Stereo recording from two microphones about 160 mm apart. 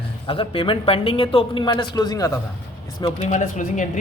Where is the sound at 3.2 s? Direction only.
50° left (ahead or behind).